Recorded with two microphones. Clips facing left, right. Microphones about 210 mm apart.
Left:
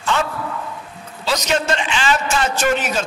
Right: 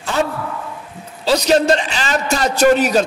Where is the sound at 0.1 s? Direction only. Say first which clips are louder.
Right 3 dB; 35° right (ahead or behind).